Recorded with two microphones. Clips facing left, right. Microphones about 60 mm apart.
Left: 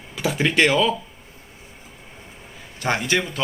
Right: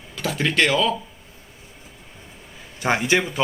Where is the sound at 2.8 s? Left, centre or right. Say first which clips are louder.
Right 2 dB; centre.